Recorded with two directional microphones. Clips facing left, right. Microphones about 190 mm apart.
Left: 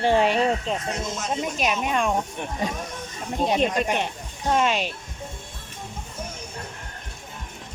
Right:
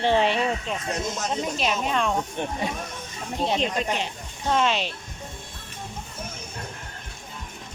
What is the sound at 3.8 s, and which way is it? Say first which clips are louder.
Speech: left 2 dB; 55° left (ahead or behind).